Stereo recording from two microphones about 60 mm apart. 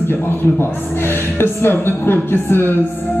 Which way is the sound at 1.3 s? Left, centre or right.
Left.